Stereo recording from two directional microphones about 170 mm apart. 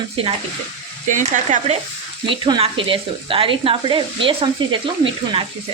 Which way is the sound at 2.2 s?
30° right (ahead or behind).